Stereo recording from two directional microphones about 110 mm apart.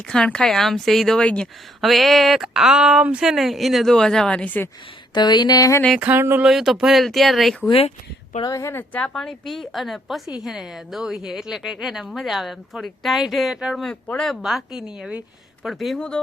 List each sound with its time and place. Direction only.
0.1 s speech: 5° left (ahead or behind)
5.1 s a sound: 40° left (ahead or behind)
5.9 s a sound: 15° right (ahead or behind)
6.4 s speech: 5° right (ahead or behind)
7.7 s speech: 65° left (ahead or behind)
8.4 s speech: 25° left (ahead or behind); by 16.2 s 10° left (ahead or behind)